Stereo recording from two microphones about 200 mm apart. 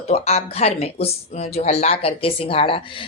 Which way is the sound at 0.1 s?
30° left (ahead or behind).